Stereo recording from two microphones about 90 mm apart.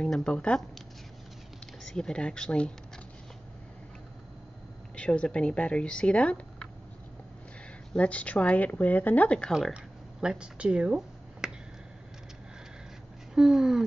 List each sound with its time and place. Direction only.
0.0 s speech: 10° left (ahead or behind)
1.9 s speech: 10° left (ahead or behind)
4.9 s speech: 15° left (ahead or behind)
7.9 s speech: 15° left (ahead or behind)
9.5 s speech: centre (ahead or behind)
9.8 s finger snapping: 10° right (ahead or behind)
13.3 s speech: 5° right (ahead or behind)